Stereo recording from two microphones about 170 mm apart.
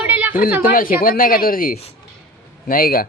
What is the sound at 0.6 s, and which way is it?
Speech, 55° left (ahead or behind).